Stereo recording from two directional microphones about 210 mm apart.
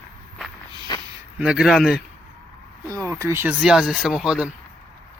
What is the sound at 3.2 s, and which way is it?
Speech, 10° right (ahead or behind).